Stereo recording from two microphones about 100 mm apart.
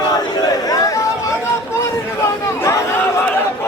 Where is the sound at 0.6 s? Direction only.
40° left (ahead or behind).